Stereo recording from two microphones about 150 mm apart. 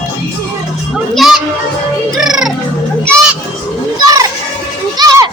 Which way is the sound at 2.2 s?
Centre (ahead or behind).